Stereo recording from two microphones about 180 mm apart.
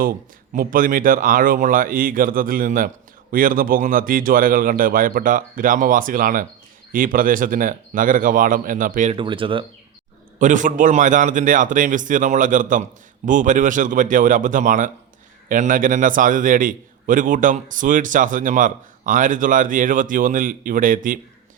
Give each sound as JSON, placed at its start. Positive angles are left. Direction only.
{"t": 0.5, "sound": "a man's voice", "side_deg": -50}
{"t": 9.1, "sound": "speech", "side_deg": -30}
{"t": 10.3, "sound": "a man's voice", "side_deg": -45}